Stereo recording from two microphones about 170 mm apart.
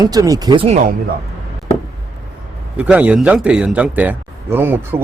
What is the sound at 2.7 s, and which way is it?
A man's voice, 5° right (ahead or behind).